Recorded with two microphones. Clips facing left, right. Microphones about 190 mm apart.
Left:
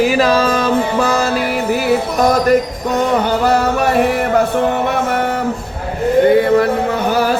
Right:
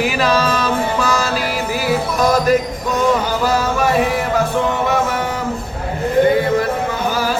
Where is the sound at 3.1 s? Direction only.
60° left (ahead or behind).